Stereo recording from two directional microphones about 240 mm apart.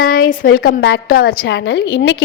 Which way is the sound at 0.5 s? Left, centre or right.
Left.